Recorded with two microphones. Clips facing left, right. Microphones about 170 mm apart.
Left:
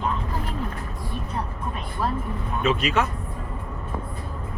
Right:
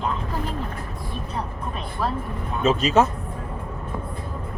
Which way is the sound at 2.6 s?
40° right (ahead or behind).